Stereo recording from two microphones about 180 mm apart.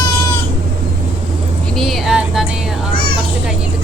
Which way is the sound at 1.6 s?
Centre (ahead or behind).